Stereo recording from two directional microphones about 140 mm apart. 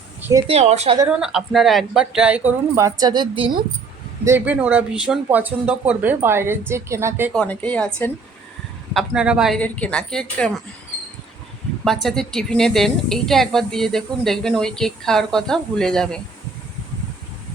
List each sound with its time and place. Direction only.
0.2 s speech: 15° right (ahead or behind)
0.4 s speech: 50° right (ahead or behind)
1.0 s speech: 5° right (ahead or behind); by 3.5 s 35° right (ahead or behind)
4.2 s speech: 15° right (ahead or behind)
7.3 s a woman's voice: 10° left (ahead or behind)
8.9 s a woman's voice: 5° right (ahead or behind)
9.6 s a woman's voice: 10° left (ahead or behind)
11.9 s a woman's voice: 5° left (ahead or behind)